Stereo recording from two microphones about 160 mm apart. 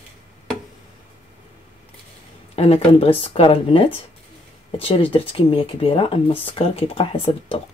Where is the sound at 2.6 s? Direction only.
40° left (ahead or behind).